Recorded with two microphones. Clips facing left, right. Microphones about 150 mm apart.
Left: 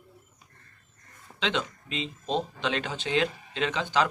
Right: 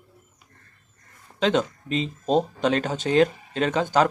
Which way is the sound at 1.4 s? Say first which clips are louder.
Right 8 dB; 45° right (ahead or behind).